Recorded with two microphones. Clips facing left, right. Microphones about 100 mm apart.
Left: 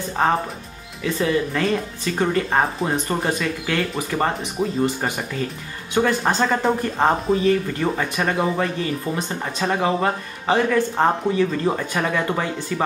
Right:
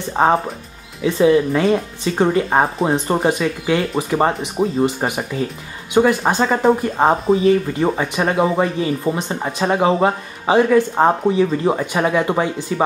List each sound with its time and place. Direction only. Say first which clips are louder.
0.1 s speech: right 5 dB; 25° right (ahead or behind)